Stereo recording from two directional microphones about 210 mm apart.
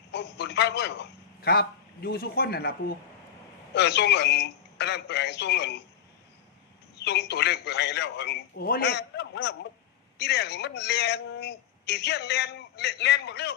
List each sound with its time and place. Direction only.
0.1 s a man's voice: 55° left (ahead or behind)
3.8 s a man's voice: 55° left (ahead or behind)
7.0 s a man's voice: 55° left (ahead or behind)